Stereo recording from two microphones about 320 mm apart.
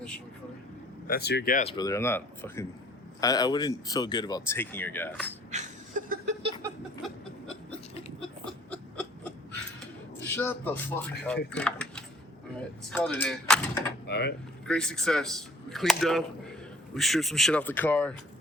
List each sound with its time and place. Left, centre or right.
1.0 s speech: left; by 5.3 s centre
5.5 s a sound: right
6.6 s a sound: centre
10.2 s speech: centre
14.1 s speech: left
14.7 s speech: centre